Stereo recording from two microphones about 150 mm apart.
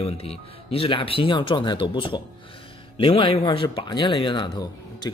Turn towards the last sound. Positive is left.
turn(degrees=30)  # may be behind; listen again after turning